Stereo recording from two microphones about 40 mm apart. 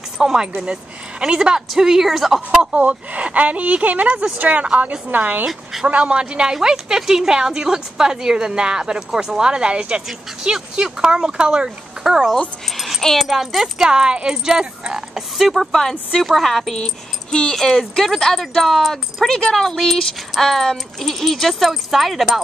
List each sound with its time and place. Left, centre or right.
0.2 s a woman's voice: centre
2.7 s speech: right
5.5 s a sound: centre
5.9 s a man's voice: right
6.5 s a woman's voice: centre
12.6 s music: centre
13.2 s speech: centre
13.7 s a woman's voice: centre
15.3 s speech: centre
15.7 s speech: centre